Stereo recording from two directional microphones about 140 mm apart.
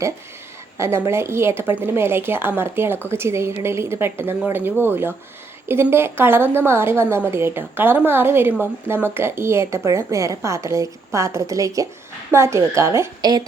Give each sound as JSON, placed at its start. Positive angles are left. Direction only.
{"t": 0.8, "sound": "a woman's voice", "side_deg": -20}